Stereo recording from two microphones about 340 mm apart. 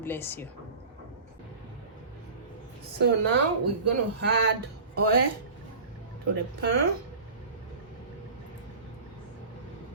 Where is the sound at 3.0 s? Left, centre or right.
Right.